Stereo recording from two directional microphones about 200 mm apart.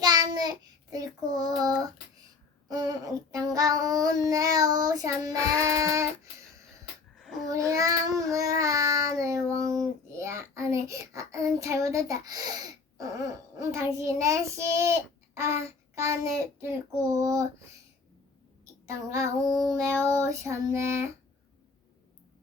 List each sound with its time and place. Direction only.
0.0 s child singing: 20° right (ahead or behind)
2.6 s child singing: 20° right (ahead or behind)
7.2 s babbling: centre (ahead or behind)
7.7 s child singing: 15° right (ahead or behind)
18.6 s a sound: 15° right (ahead or behind)
19.5 s child singing: centre (ahead or behind)
19.7 s child singing: 15° right (ahead or behind)